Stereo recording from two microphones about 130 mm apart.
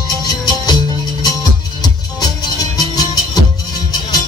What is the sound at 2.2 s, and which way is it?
Music, 30° left (ahead or behind).